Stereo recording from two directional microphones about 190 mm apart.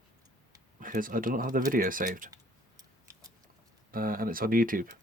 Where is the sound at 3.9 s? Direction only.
50° right (ahead or behind).